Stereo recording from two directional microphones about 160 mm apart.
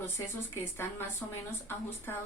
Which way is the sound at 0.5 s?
15° left (ahead or behind).